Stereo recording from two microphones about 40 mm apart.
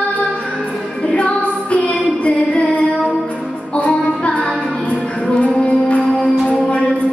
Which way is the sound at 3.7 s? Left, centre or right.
Left.